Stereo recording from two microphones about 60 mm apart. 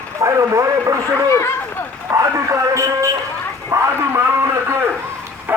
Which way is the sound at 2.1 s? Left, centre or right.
Right.